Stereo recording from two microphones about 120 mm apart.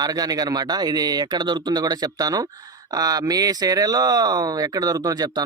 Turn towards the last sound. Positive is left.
turn(degrees=-35)  # may be behind; listen again after turning